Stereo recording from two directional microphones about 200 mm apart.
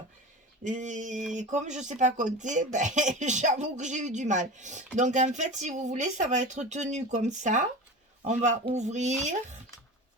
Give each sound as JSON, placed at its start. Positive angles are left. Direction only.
{"t": 0.6, "sound": "speech", "side_deg": -40}